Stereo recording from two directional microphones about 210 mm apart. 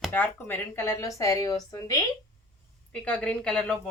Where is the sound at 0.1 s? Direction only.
10° left (ahead or behind).